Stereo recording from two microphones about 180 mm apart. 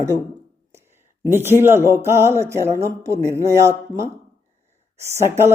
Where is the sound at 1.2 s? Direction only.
15° right (ahead or behind).